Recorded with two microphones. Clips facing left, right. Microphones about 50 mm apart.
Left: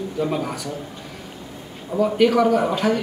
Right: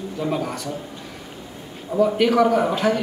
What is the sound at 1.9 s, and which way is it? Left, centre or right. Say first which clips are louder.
A man's voice: even; centre.